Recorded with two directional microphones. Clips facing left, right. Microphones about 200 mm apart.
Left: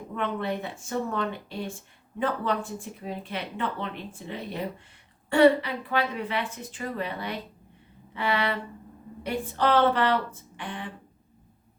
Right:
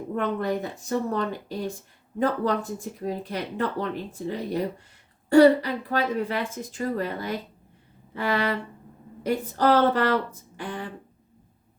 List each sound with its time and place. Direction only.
0.2 s a woman's voice: 40° right (ahead or behind)